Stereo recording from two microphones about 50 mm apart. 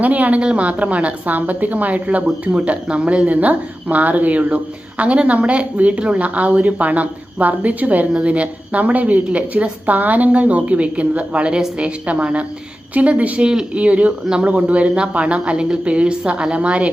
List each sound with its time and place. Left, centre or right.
0.0 s speech: right